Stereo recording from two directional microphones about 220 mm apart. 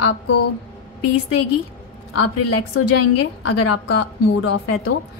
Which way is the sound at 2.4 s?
90° left.